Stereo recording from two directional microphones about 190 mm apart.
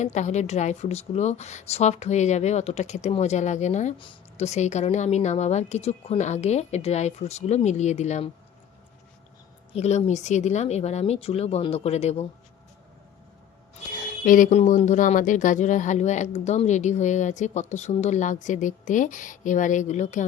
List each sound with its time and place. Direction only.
0.0 s speech: 40° left (ahead or behind)
3.9 s speech: 25° left (ahead or behind)
9.7 s speech: 35° left (ahead or behind)
13.9 s speech: 45° left (ahead or behind)